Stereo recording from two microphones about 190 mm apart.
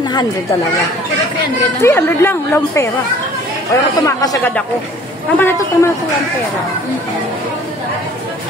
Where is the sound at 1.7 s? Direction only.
15° left (ahead or behind).